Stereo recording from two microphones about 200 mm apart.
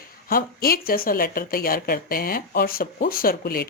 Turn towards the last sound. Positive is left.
turn(degrees=50)  # may be behind; listen again after turning